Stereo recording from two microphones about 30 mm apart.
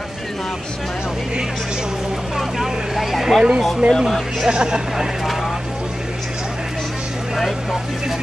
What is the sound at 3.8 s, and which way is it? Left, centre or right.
Speech, right.